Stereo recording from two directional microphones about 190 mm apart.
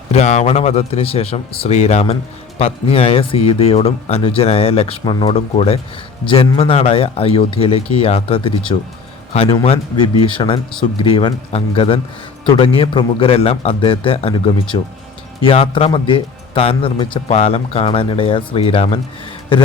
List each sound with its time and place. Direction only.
0.1 s a man's voice: 35° left (ahead or behind)